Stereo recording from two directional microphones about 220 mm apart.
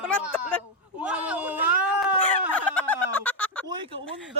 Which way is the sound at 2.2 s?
5° left (ahead or behind).